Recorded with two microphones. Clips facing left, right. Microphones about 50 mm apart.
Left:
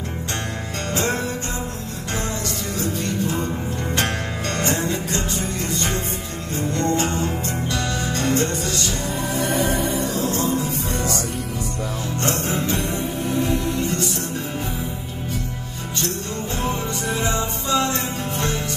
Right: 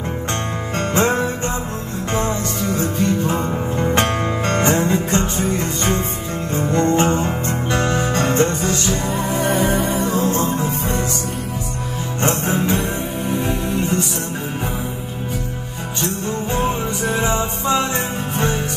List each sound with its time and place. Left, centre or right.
0.9 s music: right
3.8 s music: right
6.5 s music: right
7.4 s music: right
12.2 s music: right
13.4 s music: right
17.2 s music: right